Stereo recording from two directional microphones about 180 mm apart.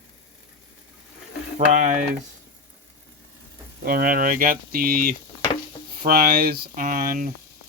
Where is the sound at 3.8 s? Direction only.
55° right (ahead or behind).